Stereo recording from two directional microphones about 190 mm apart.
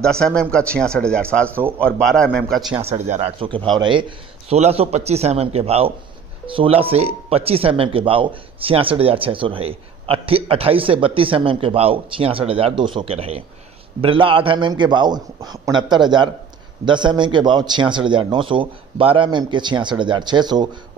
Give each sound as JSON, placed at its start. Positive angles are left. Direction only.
{"t": 0.0, "sound": "a man's voice", "side_deg": 5}
{"t": 1.5, "sound": "speech", "side_deg": -10}
{"t": 1.8, "sound": "a man's voice", "side_deg": 5}
{"t": 2.8, "sound": "a man's voice", "side_deg": -35}